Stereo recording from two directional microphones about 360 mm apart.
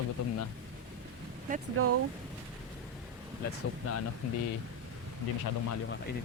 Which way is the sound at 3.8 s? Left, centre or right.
Left.